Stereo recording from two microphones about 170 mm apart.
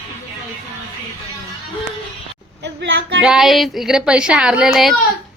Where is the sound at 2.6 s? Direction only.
90° right.